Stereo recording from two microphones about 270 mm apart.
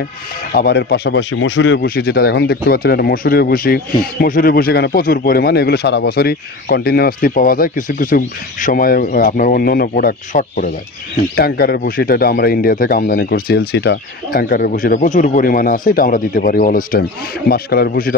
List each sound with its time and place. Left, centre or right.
0.5 s speech: left